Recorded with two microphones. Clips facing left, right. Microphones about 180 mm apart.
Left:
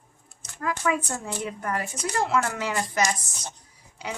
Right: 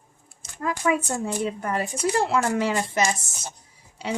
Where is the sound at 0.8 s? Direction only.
15° right (ahead or behind).